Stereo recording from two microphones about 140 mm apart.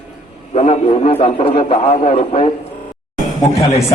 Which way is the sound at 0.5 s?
50° left (ahead or behind).